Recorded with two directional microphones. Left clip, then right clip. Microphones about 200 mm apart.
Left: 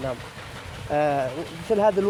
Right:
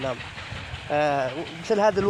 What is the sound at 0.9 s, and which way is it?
Speech, 30° right (ahead or behind).